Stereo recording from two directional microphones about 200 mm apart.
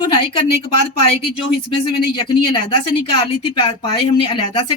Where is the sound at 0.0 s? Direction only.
30° left (ahead or behind).